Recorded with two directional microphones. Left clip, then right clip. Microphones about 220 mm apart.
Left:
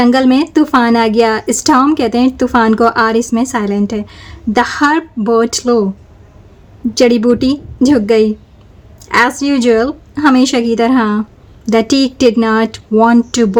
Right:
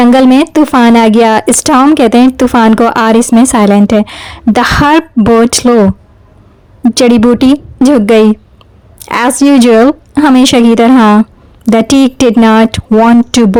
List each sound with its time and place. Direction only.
0.0 s speech: 40° right (ahead or behind)
6.9 s speech: 40° right (ahead or behind)